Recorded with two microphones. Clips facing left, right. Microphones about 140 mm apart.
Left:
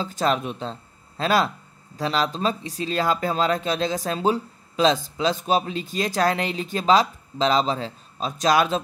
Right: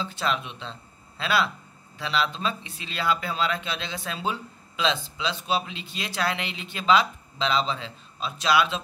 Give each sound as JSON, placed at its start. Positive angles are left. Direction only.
{"t": 0.0, "sound": "speech", "side_deg": 40}